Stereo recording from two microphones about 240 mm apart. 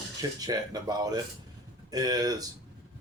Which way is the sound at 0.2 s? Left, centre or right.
Centre.